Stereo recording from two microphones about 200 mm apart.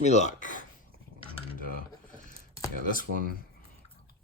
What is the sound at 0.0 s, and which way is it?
Speech, 35° left (ahead or behind).